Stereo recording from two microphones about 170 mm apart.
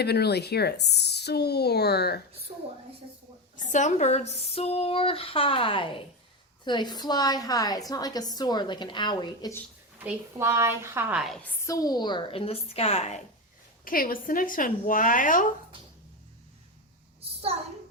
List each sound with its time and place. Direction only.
0.0 s speech: 75° left (ahead or behind)
2.5 s a woman's voice: 35° right (ahead or behind)
3.7 s a woman's voice: 45° left (ahead or behind); by 9.6 s 25° left (ahead or behind)
10.0 s a woman's voice: 10° right (ahead or behind)
11.2 s a woman's voice: centre (ahead or behind)
11.6 s speech: 20° left (ahead or behind); by 13.1 s 40° left (ahead or behind)
13.8 s speech: 55° left (ahead or behind)